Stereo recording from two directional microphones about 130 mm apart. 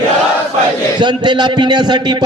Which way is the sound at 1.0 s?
35° right (ahead or behind).